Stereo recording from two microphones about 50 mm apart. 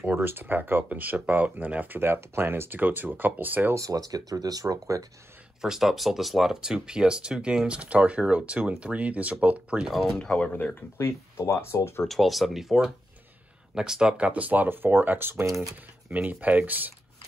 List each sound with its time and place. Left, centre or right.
0.0 s speech: right
2.0 s speech: right
2.7 s speech: right
4.3 s speech: right
5.6 s speech: centre; by 9.8 s right
10.0 s speech: centre
10.4 s speech: left
11.1 s speech: left
12.1 s speech: centre; by 15.4 s right
15.4 s speech: right
16.1 s speech: right